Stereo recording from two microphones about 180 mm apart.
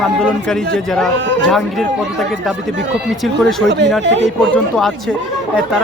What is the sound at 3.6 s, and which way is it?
Speech, 75° right (ahead or behind).